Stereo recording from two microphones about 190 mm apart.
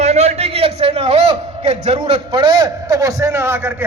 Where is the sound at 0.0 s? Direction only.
35° right (ahead or behind).